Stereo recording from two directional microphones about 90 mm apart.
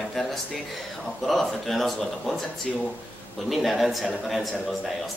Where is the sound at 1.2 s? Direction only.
Centre (ahead or behind).